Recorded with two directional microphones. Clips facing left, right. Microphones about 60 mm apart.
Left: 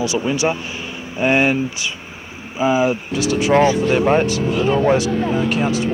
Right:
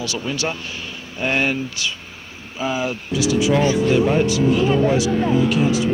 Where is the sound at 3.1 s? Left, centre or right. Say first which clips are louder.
Even; left.